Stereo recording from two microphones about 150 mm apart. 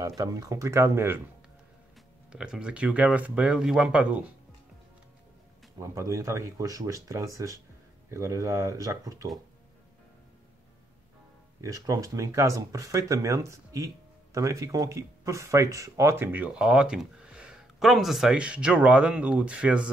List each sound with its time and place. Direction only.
0.2 s speech: 20° right (ahead or behind)
2.3 s speech: 5° right (ahead or behind)
5.8 s speech: 20° right (ahead or behind)
11.6 s speech: 20° right (ahead or behind)